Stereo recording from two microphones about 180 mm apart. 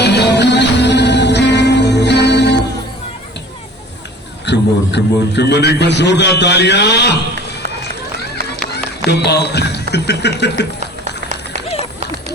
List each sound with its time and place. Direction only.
0.0 s music: 70° left (ahead or behind)
4.4 s a man's voice: 70° left (ahead or behind)
9.0 s a man's voice: 65° left (ahead or behind)
10.8 s a sound: 40° right (ahead or behind)